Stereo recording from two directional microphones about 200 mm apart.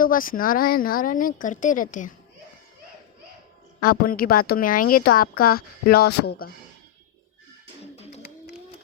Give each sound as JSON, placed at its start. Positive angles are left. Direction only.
{"t": 0.0, "sound": "a woman's voice", "side_deg": 45}
{"t": 3.8, "sound": "a woman's voice", "side_deg": 45}